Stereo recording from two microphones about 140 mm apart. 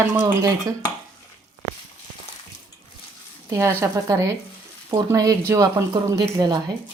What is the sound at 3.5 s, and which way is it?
Speech, 20° right (ahead or behind).